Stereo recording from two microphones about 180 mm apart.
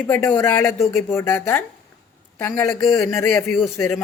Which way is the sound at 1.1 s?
15° left (ahead or behind).